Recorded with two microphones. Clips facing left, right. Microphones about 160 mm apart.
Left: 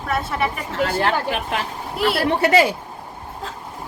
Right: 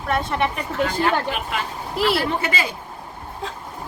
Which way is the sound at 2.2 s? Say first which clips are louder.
Left 8 dB; 75° left (ahead or behind).